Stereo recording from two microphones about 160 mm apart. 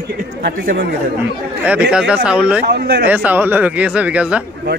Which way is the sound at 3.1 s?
10° right (ahead or behind).